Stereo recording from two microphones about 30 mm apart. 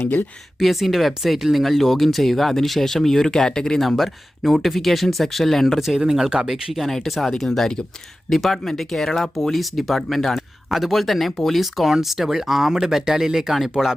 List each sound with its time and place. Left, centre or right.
0.6 s speech: centre; by 3.8 s left
3.8 s speech: centre
6.0 s speech: centre
6.8 s speech: centre